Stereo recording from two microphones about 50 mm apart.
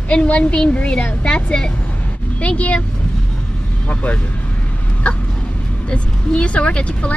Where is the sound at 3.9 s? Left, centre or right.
Left.